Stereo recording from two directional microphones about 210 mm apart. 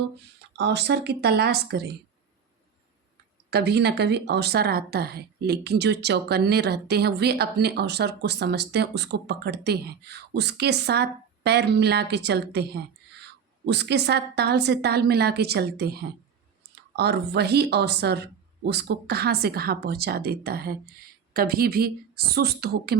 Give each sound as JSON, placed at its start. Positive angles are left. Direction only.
{"t": 0.5, "sound": "speech", "side_deg": -55}
{"t": 3.5, "sound": "speech", "side_deg": -50}